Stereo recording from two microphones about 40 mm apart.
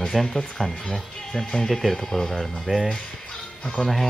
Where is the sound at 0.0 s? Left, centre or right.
Centre.